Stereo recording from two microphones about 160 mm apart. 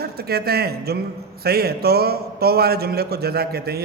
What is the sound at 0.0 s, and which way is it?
A man's voice, 80° right.